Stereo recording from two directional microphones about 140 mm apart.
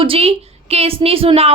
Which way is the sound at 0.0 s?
40° right (ahead or behind).